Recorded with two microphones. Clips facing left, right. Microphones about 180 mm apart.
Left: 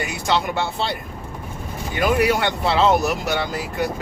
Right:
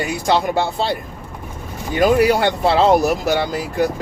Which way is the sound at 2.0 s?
30° right (ahead or behind).